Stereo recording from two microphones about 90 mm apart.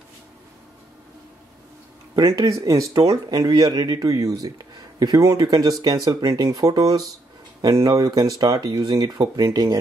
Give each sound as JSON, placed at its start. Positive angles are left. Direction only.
{"t": 2.1, "sound": "speech", "side_deg": -40}